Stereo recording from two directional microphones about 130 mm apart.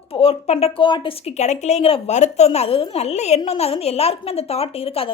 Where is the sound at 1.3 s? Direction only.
60° left (ahead or behind).